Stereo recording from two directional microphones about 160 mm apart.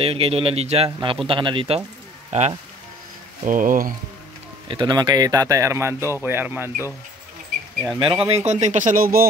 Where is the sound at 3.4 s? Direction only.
60° right (ahead or behind).